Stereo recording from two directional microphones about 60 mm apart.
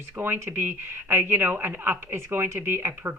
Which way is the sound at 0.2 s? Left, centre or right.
Right.